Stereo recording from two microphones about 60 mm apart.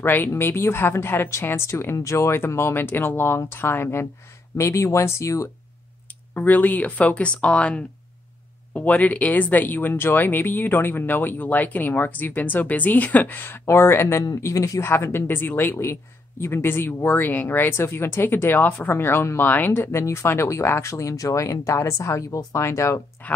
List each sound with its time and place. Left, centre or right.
0.0 s speech: left
0.3 s speech: left
2.0 s speech: left
4.6 s speech: left
6.3 s speech: left
14.4 s speech: left
14.8 s speech: left
23.2 s a sound: left